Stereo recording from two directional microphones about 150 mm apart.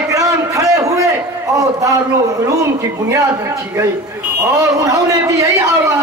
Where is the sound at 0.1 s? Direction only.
20° right (ahead or behind).